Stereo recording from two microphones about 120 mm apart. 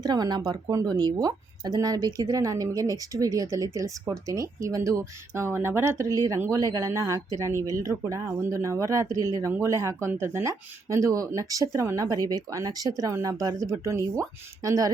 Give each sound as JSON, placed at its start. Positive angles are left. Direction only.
{"t": 0.0, "sound": "speech", "side_deg": -35}